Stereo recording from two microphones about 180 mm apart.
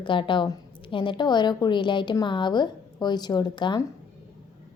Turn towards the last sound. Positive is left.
turn(degrees=25)  # may be behind; listen again after turning